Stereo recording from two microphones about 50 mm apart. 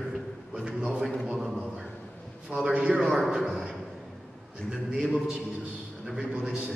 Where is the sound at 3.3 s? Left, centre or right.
Centre.